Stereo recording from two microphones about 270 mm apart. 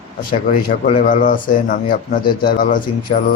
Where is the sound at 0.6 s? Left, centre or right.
Left.